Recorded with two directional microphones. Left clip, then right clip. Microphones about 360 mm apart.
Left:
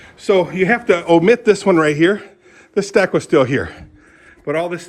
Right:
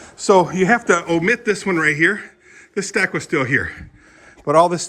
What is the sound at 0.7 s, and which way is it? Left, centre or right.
Speech, centre.